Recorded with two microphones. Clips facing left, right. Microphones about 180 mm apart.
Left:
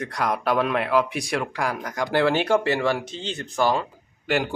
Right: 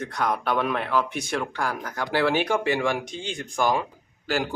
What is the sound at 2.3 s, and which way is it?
Speech, 10° right (ahead or behind).